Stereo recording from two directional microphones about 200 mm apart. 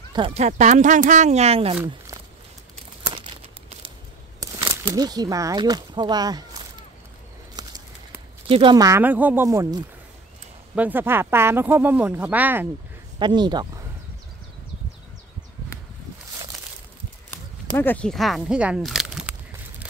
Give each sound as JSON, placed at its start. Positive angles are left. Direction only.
{"t": 0.1, "sound": "speech", "side_deg": -30}
{"t": 4.4, "sound": "speech", "side_deg": -20}
{"t": 7.6, "sound": "bird", "side_deg": -20}
{"t": 8.5, "sound": "speech", "side_deg": -25}
{"t": 13.2, "sound": "speech", "side_deg": -20}
{"t": 17.3, "sound": "speech", "side_deg": 10}